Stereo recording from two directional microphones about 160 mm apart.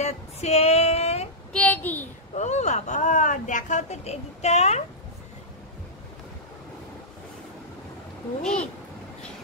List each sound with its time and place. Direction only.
0.0 s female singing: 40° left (ahead or behind)
1.5 s child singing: 10° left (ahead or behind)
2.3 s speech: 45° left (ahead or behind)
8.4 s a child's voice: 5° left (ahead or behind)